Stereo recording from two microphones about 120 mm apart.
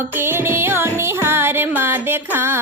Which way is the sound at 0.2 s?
20° right (ahead or behind).